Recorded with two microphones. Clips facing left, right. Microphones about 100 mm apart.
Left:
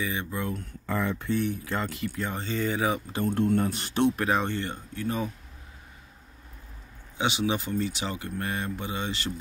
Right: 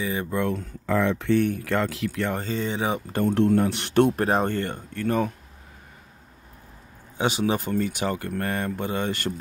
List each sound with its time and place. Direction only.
0.0 s speech: 35° right (ahead or behind)
0.3 s speech: 70° right (ahead or behind); by 2.3 s 85° right
2.5 s speech: 30° right (ahead or behind)
3.1 s speech: 55° right (ahead or behind)
3.3 s speech: 75° right (ahead or behind); by 4.1 s 60° right (ahead or behind)
4.2 s speech: 40° right (ahead or behind); by 5.3 s 60° right (ahead or behind)
7.2 s speech: 40° right (ahead or behind)